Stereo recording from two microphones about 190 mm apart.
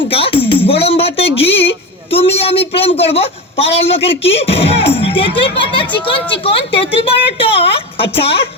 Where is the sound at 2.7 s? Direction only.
30° left (ahead or behind).